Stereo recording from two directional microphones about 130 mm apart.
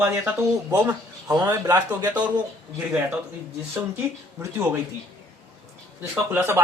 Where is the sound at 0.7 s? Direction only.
30° right (ahead or behind).